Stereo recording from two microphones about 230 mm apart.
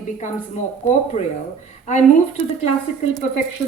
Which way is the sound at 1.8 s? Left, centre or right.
Left.